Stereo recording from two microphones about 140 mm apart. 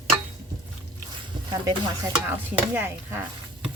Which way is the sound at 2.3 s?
15° right (ahead or behind).